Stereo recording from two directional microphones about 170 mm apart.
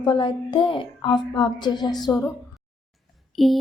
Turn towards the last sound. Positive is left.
turn(degrees=0)  # may be behind; listen again after turning